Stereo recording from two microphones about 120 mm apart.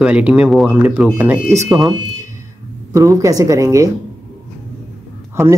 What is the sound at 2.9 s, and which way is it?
Speech, 25° right (ahead or behind).